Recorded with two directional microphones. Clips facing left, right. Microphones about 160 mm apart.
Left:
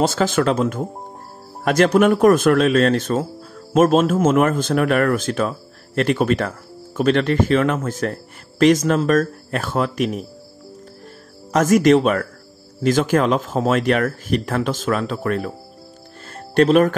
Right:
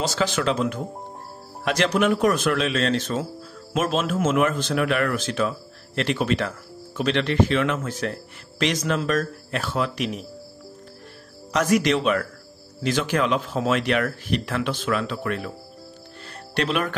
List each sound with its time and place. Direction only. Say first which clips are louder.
0.0 s speech: left 6 dB; 50° left (ahead or behind)
11.5 s speech: left 7 dB; 45° left (ahead or behind)
16.3 s music: left 11 dB; 45° left (ahead or behind)